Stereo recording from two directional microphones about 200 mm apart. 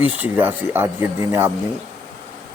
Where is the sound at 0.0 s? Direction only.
10° right (ahead or behind).